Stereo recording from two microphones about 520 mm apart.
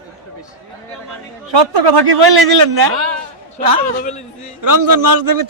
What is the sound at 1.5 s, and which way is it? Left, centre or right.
A man's voice, right.